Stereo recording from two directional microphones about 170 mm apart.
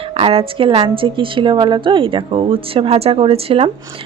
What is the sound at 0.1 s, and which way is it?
Speech, 35° right (ahead or behind).